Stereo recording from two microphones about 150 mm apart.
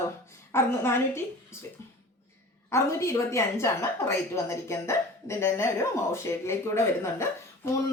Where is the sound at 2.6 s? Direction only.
20° left (ahead or behind).